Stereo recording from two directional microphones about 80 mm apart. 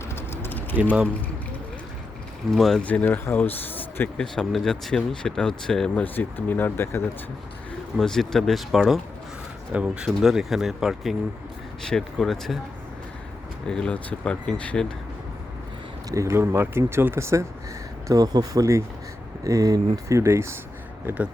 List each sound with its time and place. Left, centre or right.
0.1 s typing: left
2.6 s speech: centre
2.8 s speech: centre
4.2 s speech: centre
5.9 s speech: left
7.9 s speech: centre
9.7 s speech: centre
10.1 s speech: centre
11.8 s speech: centre
13.7 s speech: centre
16.1 s speech: right
18.1 s speech: right